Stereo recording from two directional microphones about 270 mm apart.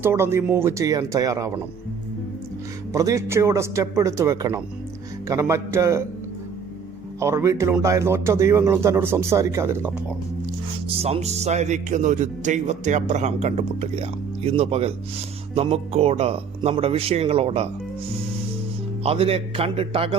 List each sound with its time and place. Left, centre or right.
0.0 s speech: centre
2.9 s speech: centre
7.2 s speech: centre
11.0 s speech: right
19.0 s speech: right